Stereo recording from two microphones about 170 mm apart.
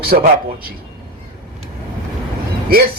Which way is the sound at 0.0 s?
70° right (ahead or behind).